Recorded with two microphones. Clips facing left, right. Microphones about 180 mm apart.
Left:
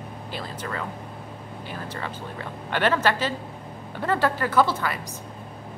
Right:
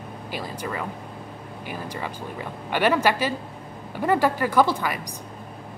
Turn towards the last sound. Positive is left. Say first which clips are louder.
# right 1 dB
turn(degrees=-15)  # may be behind; listen again after turning